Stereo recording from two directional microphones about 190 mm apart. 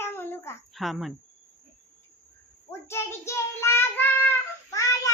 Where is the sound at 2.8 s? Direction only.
15° left (ahead or behind).